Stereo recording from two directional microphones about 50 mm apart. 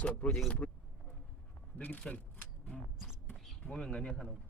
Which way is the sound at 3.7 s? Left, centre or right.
Centre.